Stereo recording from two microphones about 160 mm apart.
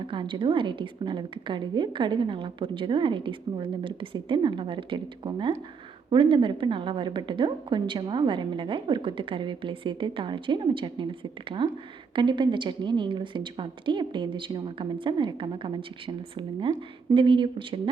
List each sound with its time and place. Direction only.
0.1 s a woman's voice: 30° right (ahead or behind)